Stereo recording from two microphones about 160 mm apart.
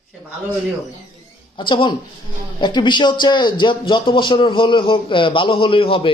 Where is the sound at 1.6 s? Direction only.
30° left (ahead or behind).